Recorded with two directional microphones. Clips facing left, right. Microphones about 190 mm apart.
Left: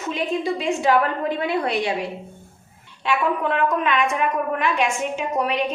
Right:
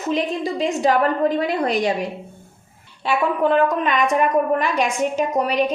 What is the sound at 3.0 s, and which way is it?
A woman's voice, 35° right (ahead or behind).